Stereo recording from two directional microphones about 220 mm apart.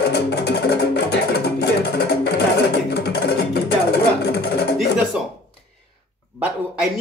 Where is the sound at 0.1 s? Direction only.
50° left (ahead or behind).